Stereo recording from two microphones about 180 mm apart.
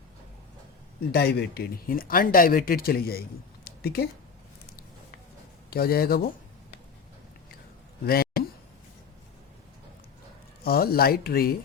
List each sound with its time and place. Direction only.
1.1 s speech: 65° left (ahead or behind)
5.7 s speech: 60° left (ahead or behind)
8.0 s a sound: 55° left (ahead or behind)
10.6 s speech: 60° left (ahead or behind)